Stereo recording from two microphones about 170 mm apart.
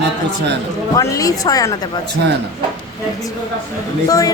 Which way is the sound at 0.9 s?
20° left (ahead or behind).